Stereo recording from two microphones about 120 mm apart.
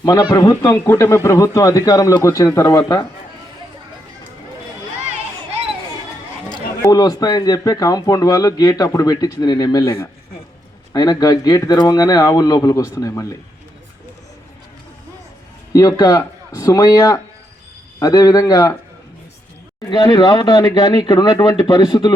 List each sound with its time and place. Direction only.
0.0 s speech: 35° left (ahead or behind)
0.9 s speech: 20° left (ahead or behind)
6.9 s speech: 35° left (ahead or behind)
9.8 s speech: 20° left (ahead or behind)
10.9 s speech: 35° left (ahead or behind)
15.7 s speech: 30° left (ahead or behind)
19.9 s speech: 40° left (ahead or behind)